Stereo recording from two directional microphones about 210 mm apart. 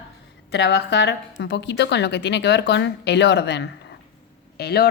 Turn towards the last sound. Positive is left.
turn(degrees=50)  # may be behind; listen again after turning